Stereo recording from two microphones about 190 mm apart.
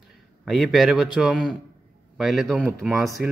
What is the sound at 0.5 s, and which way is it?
A man's voice, centre (ahead or behind).